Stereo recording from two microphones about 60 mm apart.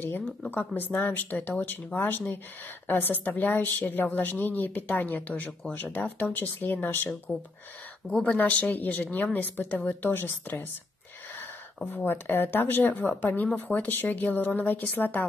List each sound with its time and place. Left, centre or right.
0.0 s a woman's voice: left
8.1 s speech: centre
8.4 s a woman's voice: left